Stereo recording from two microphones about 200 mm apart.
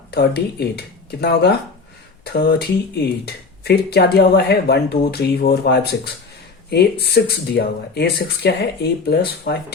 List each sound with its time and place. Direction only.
0.1 s speech: 55° left (ahead or behind)